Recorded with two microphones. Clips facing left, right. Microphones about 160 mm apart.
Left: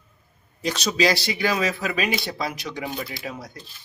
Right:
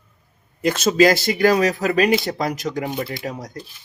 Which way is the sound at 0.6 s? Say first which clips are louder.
Right 7 dB; 50° right (ahead or behind).